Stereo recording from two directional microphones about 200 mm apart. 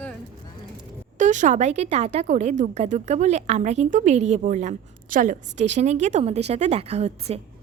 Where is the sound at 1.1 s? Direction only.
40° right (ahead or behind).